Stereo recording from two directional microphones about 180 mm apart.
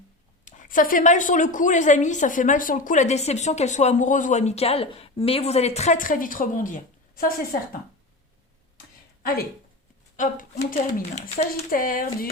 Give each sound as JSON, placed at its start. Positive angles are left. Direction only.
{"t": 0.4, "sound": "a woman's voice", "side_deg": 45}
{"t": 9.2, "sound": "speech", "side_deg": 55}
{"t": 10.2, "sound": "a woman's voice", "side_deg": 45}